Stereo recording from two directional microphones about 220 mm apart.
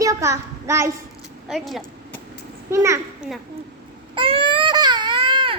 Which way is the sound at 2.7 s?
10° right (ahead or behind).